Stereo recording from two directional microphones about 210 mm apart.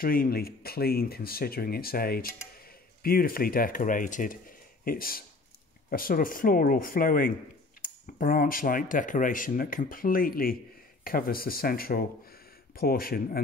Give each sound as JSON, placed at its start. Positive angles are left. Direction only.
{"t": 0.0, "sound": "speech", "side_deg": 45}